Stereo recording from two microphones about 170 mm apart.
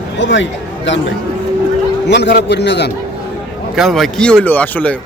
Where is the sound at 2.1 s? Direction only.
85° left.